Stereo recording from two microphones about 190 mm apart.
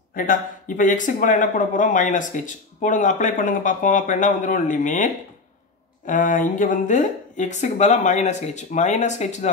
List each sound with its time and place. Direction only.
0.1 s speech: 45° left (ahead or behind)